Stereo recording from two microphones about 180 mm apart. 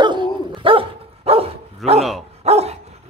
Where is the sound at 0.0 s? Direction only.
25° right (ahead or behind).